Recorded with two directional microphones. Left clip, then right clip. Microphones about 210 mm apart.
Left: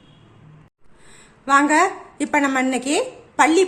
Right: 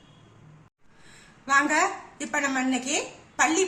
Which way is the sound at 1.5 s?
35° left (ahead or behind).